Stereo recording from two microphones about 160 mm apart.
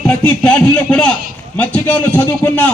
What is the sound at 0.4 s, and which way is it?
A man's voice, 5° left (ahead or behind).